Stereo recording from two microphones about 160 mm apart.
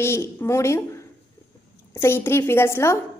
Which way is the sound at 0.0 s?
15° left (ahead or behind).